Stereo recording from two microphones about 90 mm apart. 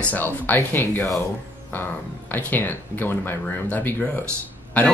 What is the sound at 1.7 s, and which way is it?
Speech, 20° left (ahead or behind).